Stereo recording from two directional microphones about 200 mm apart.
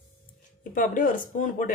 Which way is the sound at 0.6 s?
40° left (ahead or behind).